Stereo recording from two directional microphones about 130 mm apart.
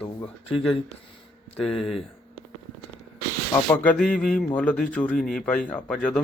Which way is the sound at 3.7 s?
10° left (ahead or behind).